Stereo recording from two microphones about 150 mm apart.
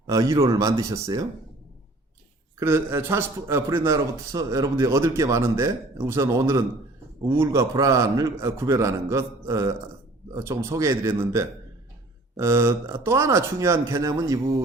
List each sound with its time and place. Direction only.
0.1 s a man's voice: 20° right (ahead or behind)
2.6 s a man's voice: 15° right (ahead or behind)